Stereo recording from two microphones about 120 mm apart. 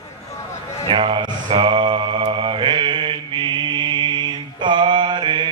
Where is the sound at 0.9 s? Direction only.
45° right (ahead or behind).